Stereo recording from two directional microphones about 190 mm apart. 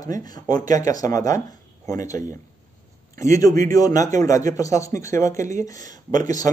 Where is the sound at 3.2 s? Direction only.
15° left (ahead or behind).